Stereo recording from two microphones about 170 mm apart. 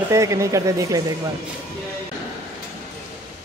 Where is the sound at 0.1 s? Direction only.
20° right (ahead or behind).